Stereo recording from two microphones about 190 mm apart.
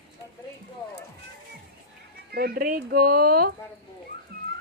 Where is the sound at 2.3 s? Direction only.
55° right (ahead or behind).